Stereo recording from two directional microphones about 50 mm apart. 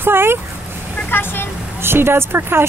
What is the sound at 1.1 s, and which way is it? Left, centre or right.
Speech, left.